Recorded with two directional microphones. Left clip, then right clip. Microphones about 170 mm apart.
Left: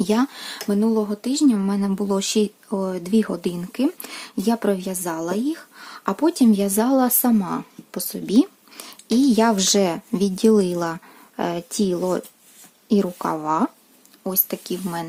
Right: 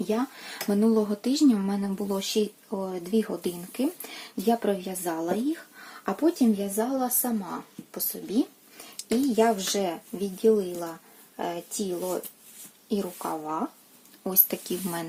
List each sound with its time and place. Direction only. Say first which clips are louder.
0.1 s speech: left 4 dB; 35° left (ahead or behind)
0.8 s speech: left 2 dB; 15° left (ahead or behind); by 6.7 s 40° left (ahead or behind)
6.7 s speech: left 8 dB; 70° left (ahead or behind)
9.0 s speech: left 5 dB; 55° left (ahead or behind)
14.3 s a woman's voice: left 4 dB; 20° left (ahead or behind)